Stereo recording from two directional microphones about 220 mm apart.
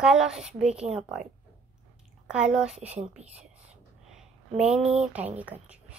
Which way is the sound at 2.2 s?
5° right (ahead or behind).